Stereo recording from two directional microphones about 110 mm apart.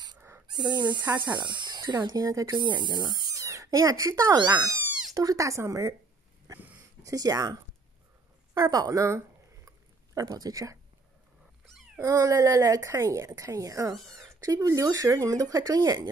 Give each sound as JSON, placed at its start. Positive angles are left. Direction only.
{"t": 0.5, "sound": "speech", "side_deg": -40}
{"t": 7.0, "sound": "speech", "side_deg": -35}
{"t": 8.5, "sound": "speech", "side_deg": -30}
{"t": 9.7, "sound": "a sound", "side_deg": -30}
{"t": 12.1, "sound": "speech", "side_deg": -35}